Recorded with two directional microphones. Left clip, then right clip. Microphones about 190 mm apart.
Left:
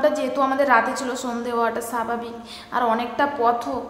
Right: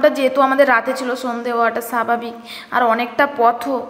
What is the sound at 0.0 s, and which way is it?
A woman's voice, 25° right (ahead or behind).